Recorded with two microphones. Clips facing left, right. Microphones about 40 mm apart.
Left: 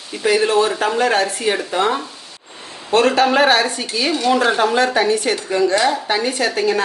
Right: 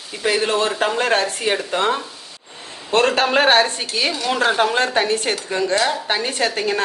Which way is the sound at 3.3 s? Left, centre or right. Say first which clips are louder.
Left 1 dB; right.